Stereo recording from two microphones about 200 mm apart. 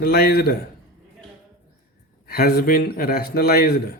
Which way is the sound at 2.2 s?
50° left (ahead or behind).